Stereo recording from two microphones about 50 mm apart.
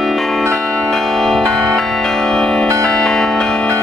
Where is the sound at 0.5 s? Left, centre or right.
Centre.